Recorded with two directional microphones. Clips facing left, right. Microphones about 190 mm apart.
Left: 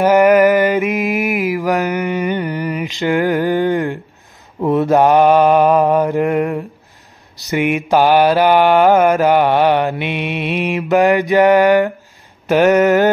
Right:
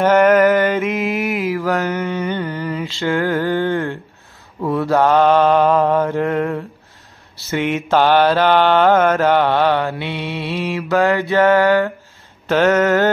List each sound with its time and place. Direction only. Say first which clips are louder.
0.0 s mantra: left 2 dB; 10° left (ahead or behind)